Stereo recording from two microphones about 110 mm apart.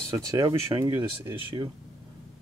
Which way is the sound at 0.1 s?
35° right (ahead or behind).